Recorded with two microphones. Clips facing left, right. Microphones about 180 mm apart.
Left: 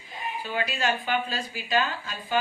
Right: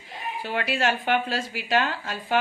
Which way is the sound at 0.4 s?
70° right (ahead or behind).